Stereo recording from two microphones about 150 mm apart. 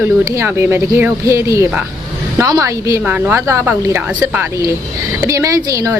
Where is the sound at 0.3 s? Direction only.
15° right (ahead or behind).